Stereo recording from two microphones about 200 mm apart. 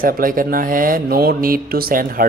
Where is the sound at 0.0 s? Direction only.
45° right (ahead or behind).